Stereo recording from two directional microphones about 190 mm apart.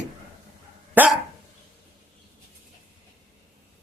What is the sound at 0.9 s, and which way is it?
Dog, 10° right (ahead or behind).